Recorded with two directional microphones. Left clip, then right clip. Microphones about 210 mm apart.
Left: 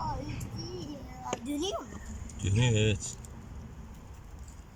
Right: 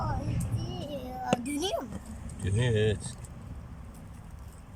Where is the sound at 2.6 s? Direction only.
5° left (ahead or behind).